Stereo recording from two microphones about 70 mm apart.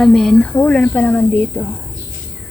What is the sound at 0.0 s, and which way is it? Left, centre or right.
Speech, centre.